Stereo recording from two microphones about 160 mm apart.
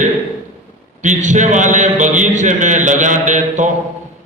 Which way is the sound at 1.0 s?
50° right (ahead or behind).